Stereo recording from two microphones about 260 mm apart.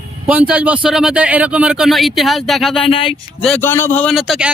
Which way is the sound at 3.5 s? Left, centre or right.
Centre.